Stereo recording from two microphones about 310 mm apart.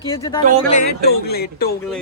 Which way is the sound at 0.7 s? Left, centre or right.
Left.